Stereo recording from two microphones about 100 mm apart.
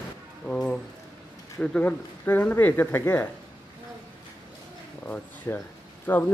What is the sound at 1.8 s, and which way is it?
Speech, 20° left (ahead or behind).